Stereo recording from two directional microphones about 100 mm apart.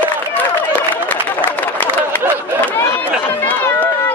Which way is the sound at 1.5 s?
20° left (ahead or behind).